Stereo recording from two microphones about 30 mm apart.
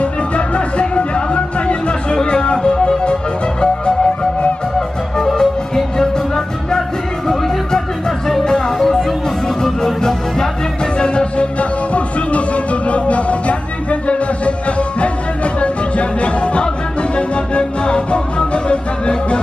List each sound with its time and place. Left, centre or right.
0.6 s music: left
4.7 s music: centre
8.5 s music: left
8.7 s music: centre
11.0 s music: left
11.9 s music: left